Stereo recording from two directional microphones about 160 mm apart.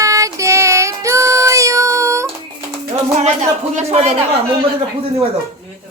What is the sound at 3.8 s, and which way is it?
Speech, 40° right (ahead or behind).